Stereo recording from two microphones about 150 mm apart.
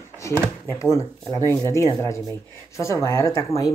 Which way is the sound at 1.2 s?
25° right (ahead or behind).